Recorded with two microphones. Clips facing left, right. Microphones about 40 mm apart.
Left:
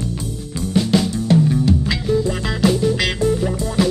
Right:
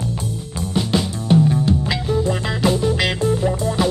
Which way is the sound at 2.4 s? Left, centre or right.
Centre.